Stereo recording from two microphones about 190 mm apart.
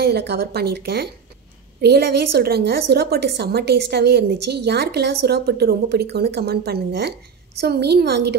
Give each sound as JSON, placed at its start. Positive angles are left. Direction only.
{"t": 0.0, "sound": "a woman's voice", "side_deg": -60}